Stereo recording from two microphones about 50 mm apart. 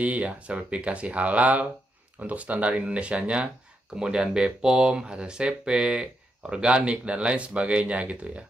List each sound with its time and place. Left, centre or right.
0.0 s speech: right